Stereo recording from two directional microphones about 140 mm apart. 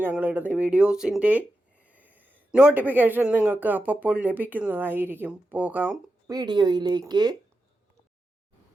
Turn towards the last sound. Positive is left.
turn(degrees=-30)  # may be behind; listen again after turning